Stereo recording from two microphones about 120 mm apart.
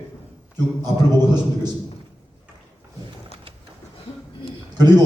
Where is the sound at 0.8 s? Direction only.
35° right (ahead or behind).